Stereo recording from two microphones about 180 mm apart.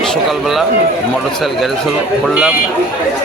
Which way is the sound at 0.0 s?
Centre (ahead or behind).